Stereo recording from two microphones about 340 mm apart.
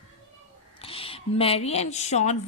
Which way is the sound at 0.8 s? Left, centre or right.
Centre.